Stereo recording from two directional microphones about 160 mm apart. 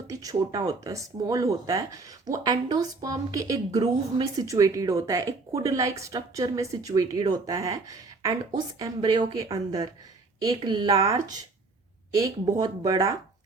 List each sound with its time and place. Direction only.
0.1 s speech: 20° right (ahead or behind)